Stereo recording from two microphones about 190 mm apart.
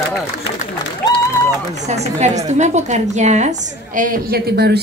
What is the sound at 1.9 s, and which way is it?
A woman's voice, 35° right (ahead or behind).